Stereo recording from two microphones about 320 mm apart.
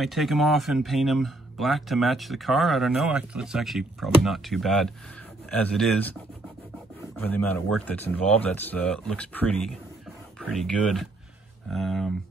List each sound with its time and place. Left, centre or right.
0.0 s speech: centre
7.2 s speech: centre